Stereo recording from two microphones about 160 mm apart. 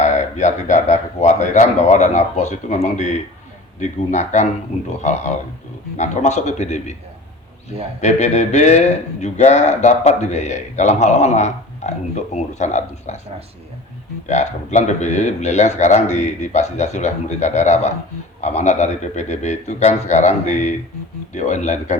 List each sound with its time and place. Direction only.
0.0 s speech: 50° left (ahead or behind)
6.0 s speech: 45° left (ahead or behind)
8.0 s speech: 45° left (ahead or behind)
14.3 s speech: 45° left (ahead or behind)